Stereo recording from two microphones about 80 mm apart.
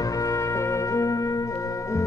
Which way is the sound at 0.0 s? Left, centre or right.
Left.